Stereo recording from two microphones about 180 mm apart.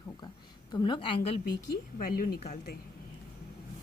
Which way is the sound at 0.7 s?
25° left (ahead or behind).